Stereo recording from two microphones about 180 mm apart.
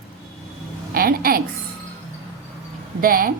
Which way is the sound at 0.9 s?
55° right (ahead or behind).